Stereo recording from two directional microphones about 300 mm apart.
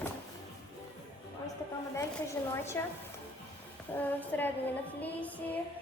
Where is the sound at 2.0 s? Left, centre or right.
Centre.